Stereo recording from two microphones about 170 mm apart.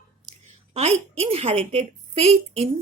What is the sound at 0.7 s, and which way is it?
A woman's voice, 35° right (ahead or behind).